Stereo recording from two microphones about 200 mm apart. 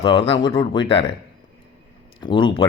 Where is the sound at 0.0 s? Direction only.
25° left (ahead or behind).